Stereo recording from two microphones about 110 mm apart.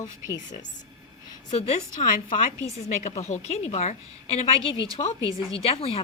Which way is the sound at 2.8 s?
90° left.